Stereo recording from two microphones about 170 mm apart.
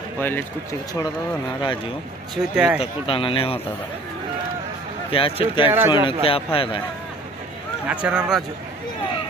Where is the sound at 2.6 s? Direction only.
5° right (ahead or behind).